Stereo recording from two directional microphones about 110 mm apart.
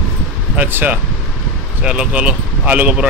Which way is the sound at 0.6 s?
15° right (ahead or behind).